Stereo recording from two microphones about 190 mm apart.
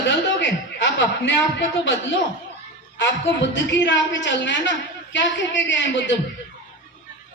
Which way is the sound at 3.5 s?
70° left (ahead or behind).